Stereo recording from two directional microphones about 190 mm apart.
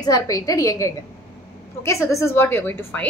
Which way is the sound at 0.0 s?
20° left (ahead or behind).